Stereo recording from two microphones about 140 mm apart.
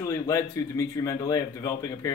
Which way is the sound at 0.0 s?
20° left (ahead or behind).